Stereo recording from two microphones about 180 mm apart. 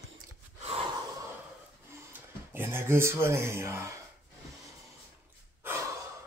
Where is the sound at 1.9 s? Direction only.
15° right (ahead or behind).